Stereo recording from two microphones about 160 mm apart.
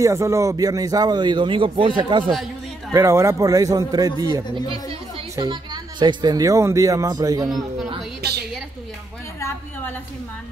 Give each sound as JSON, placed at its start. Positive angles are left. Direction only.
{"t": 0.0, "sound": "a man's voice", "side_deg": -20}
{"t": 2.9, "sound": "a man's voice", "side_deg": -15}
{"t": 7.4, "sound": "a man's voice", "side_deg": 0}